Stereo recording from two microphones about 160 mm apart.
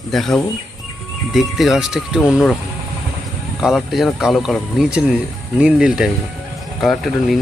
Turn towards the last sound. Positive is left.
turn(degrees=0)  # may be behind; listen again after turning